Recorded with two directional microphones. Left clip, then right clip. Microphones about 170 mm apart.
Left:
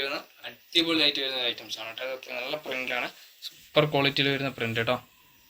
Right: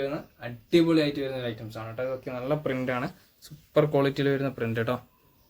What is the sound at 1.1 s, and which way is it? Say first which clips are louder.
A man's voice: left 3 dB; 40° right (ahead or behind).